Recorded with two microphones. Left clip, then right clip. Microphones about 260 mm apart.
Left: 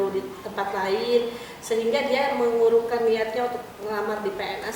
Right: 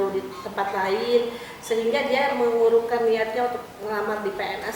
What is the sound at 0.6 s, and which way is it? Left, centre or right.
A woman's voice, centre.